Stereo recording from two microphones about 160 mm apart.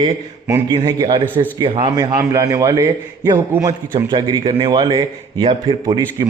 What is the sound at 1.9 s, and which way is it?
A man's voice, 20° right (ahead or behind).